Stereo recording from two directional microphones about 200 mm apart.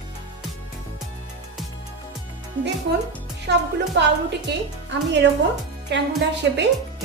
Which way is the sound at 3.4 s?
60° right (ahead or behind).